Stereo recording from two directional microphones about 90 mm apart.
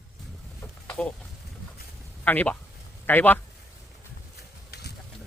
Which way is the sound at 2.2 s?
20° left (ahead or behind).